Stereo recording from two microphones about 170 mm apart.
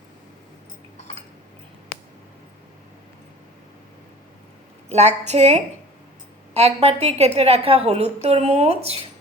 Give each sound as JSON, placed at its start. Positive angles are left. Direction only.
{"t": 4.9, "sound": "a woman's voice", "side_deg": -40}